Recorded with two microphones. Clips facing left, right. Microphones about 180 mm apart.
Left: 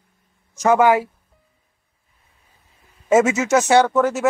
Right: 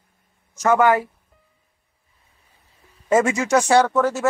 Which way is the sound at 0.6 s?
15° left (ahead or behind).